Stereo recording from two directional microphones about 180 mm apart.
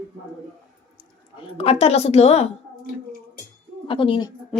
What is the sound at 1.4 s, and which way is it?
A woman's voice, 30° left (ahead or behind).